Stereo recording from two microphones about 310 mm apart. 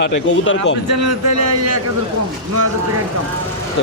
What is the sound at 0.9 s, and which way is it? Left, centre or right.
Speech, right.